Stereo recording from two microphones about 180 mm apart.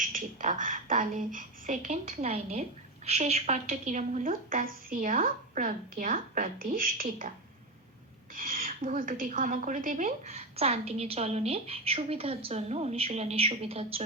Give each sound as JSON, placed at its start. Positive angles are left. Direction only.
{"t": 0.0, "sound": "a woman's voice", "side_deg": -50}
{"t": 8.4, "sound": "a woman's voice", "side_deg": -50}